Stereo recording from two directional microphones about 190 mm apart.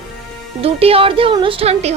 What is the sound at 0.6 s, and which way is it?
A woman's voice, 30° right (ahead or behind).